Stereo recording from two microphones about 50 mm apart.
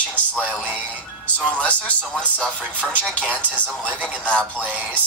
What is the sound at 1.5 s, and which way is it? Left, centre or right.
Speech, left.